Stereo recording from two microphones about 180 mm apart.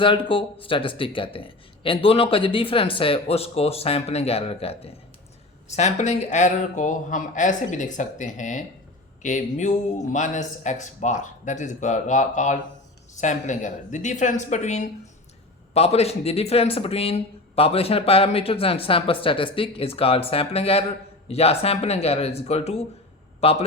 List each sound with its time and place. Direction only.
0.0 s a man's voice: 30° left (ahead or behind)